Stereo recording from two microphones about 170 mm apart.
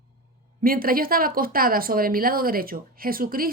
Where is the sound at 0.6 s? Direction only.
60° right (ahead or behind).